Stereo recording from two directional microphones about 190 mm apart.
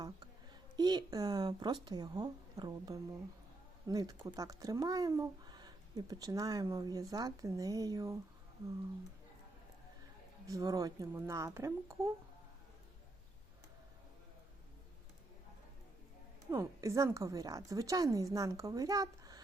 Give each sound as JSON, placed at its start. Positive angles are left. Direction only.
{"t": 0.8, "sound": "speech", "side_deg": -20}
{"t": 10.4, "sound": "a woman's voice", "side_deg": -20}
{"t": 16.5, "sound": "a woman's voice", "side_deg": -15}